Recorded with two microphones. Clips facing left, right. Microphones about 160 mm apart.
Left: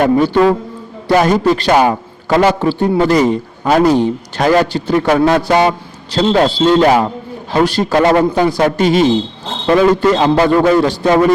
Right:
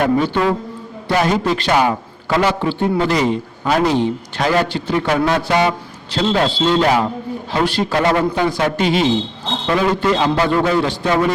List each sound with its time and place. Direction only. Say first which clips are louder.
0.0 s a man's voice: left 5 dB; 40° left (ahead or behind)